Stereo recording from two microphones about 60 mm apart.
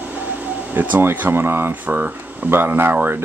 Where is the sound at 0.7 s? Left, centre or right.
Right.